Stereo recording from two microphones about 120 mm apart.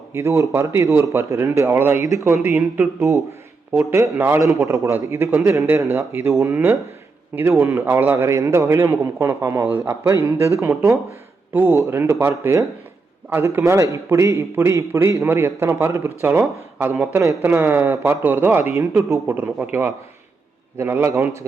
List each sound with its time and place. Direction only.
0.1 s a man's voice: 20° right (ahead or behind)
10.1 s a man's voice: 25° right (ahead or behind)